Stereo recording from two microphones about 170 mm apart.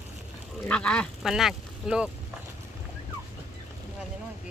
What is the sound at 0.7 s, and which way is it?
Speech, 5° left (ahead or behind).